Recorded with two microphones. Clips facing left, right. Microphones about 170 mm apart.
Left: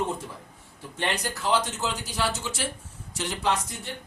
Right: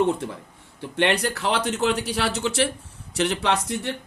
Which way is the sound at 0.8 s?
70° right (ahead or behind).